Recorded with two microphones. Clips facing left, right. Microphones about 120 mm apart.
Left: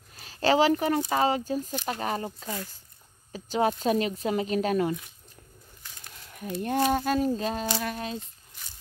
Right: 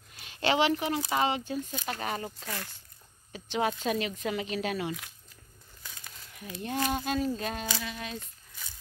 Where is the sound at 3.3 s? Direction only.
40° left (ahead or behind).